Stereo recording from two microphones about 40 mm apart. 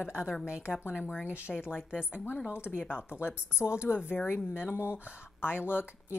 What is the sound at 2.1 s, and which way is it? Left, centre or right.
Speech, left.